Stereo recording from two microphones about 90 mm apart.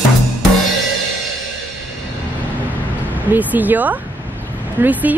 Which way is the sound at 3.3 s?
20° right (ahead or behind).